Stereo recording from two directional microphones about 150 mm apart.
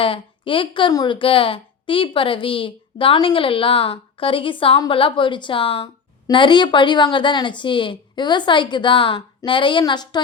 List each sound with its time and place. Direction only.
0.0 s a woman's voice: 35° left (ahead or behind)